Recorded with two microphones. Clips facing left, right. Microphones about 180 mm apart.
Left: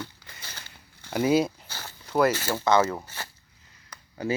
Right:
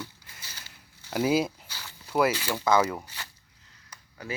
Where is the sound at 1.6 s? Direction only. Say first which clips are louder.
Left 4 dB; 50° left (ahead or behind).